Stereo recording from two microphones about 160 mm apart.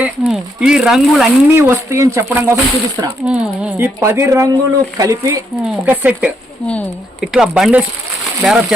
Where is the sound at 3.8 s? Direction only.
15° right (ahead or behind).